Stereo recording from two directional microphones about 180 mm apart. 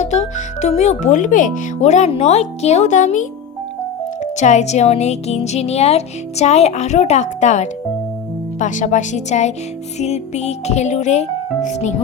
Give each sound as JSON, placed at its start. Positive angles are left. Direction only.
{"t": 0.0, "sound": "speech", "side_deg": 40}